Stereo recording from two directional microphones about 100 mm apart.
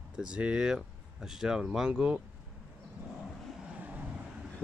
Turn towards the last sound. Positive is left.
turn(degrees=-15)  # may be behind; listen again after turning